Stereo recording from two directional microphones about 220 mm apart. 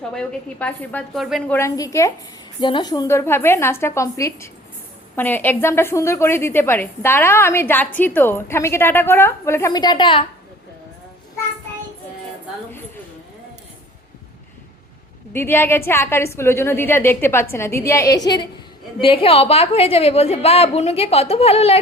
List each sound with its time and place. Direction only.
0.1 s a woman's voice: 5° left (ahead or behind)
1.5 s a woman's voice: 15° left (ahead or behind)
15.3 s a woman's voice: 10° left (ahead or behind); by 21.8 s 30° left (ahead or behind)